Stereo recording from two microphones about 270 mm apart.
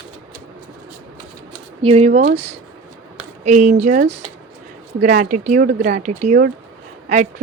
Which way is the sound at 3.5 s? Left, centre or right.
Right.